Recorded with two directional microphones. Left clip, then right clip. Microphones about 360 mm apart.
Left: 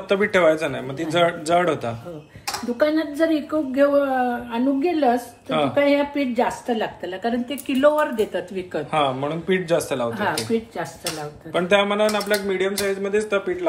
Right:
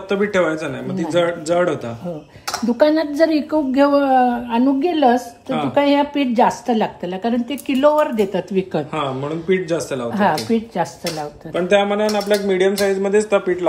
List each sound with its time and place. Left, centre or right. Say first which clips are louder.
0.1 s speech: left 1 dB; centre
2.8 s a woman's voice: right 5 dB; right
8.9 s speech: left 1 dB; centre
10.1 s a woman's voice: right 5 dB; right
11.5 s speech: right 2 dB; centre